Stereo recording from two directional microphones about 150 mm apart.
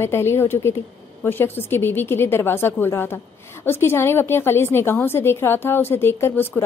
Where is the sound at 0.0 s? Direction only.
15° left (ahead or behind).